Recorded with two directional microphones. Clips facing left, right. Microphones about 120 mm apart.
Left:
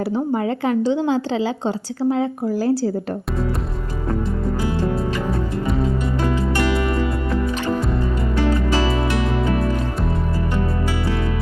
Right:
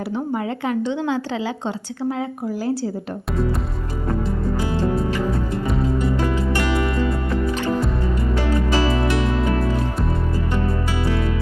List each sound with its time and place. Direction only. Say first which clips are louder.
0.3 s a woman's voice: left 2 dB; 35° left (ahead or behind)
4.6 s music: even; 25° right (ahead or behind)